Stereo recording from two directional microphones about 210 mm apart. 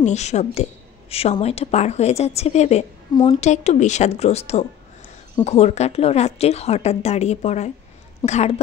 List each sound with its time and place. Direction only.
0.0 s a woman's voice: 35° left (ahead or behind)